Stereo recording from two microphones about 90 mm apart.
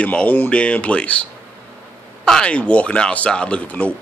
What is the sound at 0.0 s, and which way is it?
Speech, 15° left (ahead or behind).